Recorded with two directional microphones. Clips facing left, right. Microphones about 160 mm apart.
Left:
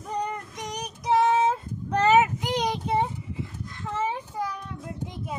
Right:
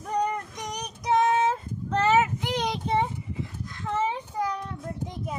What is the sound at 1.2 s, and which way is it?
Child singing, 10° left (ahead or behind).